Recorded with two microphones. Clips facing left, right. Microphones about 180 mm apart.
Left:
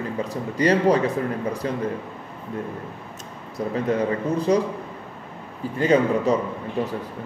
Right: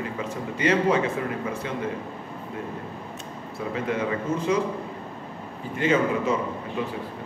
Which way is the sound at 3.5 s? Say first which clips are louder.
Left 5 dB; 40° left (ahead or behind).